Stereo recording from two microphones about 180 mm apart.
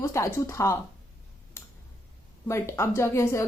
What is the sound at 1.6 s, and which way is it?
Tick, 15° left (ahead or behind).